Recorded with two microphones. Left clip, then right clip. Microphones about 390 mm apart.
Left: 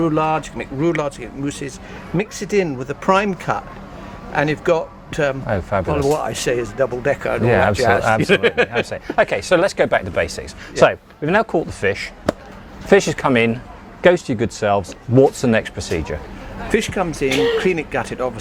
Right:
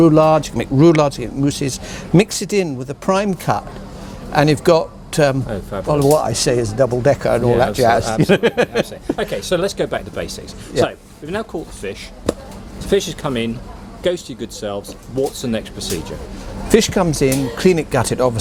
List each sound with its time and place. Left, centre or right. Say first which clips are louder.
0.0 s speech: right 7 dB; right
2.6 s speech: left 1 dB; right
5.5 s speech: left 5 dB; left
5.9 s speech: right 8 dB; right
8.3 s speech: even; right
8.9 s speech: left 4 dB; left
11.2 s speech: left 8 dB; left
11.8 s speech: left 8 dB; left
16.6 s speech: right 5 dB; right